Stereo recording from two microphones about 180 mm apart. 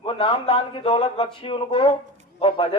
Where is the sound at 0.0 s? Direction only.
30° left (ahead or behind).